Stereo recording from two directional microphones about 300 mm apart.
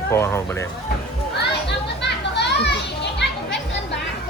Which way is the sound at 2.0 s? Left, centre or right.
Left.